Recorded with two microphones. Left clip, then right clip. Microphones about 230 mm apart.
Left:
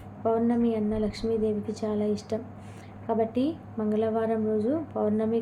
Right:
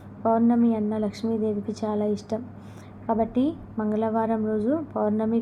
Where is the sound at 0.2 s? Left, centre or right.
Centre.